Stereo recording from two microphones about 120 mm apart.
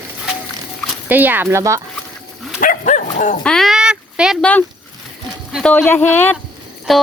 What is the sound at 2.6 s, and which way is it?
Dog, 90° left.